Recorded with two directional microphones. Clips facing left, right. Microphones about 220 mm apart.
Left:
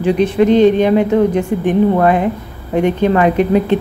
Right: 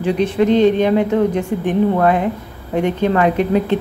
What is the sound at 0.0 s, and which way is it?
Speech, 15° left (ahead or behind).